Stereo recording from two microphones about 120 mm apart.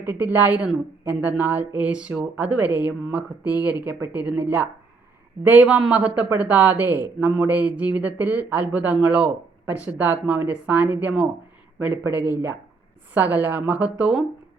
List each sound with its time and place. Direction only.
0.0 s speech: 15° right (ahead or behind)